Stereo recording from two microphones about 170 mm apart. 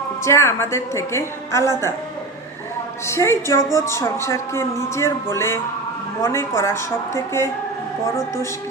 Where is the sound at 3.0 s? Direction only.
15° left (ahead or behind).